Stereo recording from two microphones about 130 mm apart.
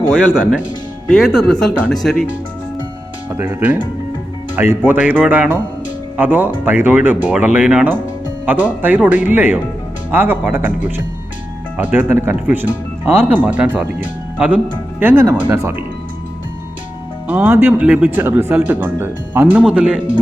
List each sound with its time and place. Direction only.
0.1 s speech: 5° right (ahead or behind)
1.0 s speech: 5° left (ahead or behind)
3.3 s speech: 15° right (ahead or behind)
17.2 s speech: 10° right (ahead or behind)